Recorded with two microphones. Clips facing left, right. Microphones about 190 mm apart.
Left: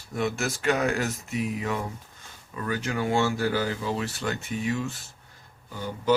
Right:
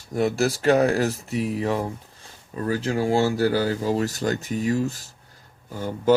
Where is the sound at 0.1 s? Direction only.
35° right (ahead or behind).